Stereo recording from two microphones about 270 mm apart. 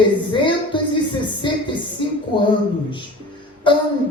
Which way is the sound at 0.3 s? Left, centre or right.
Centre.